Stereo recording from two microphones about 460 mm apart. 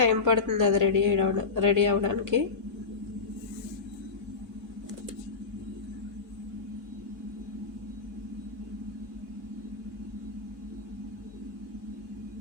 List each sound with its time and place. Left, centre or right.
0.0 s a woman's voice: right